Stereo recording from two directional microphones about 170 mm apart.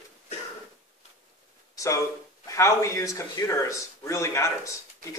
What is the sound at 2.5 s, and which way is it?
A man's voice, 15° left (ahead or behind).